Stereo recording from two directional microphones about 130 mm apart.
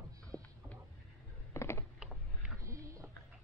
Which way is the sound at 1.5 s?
20° left (ahead or behind).